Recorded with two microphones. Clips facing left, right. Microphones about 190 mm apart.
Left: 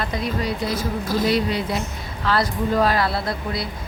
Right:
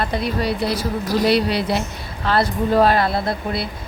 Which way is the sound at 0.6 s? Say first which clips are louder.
Right 2 dB; 70° right (ahead or behind).